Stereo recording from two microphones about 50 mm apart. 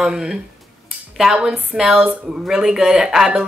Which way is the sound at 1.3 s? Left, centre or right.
Right.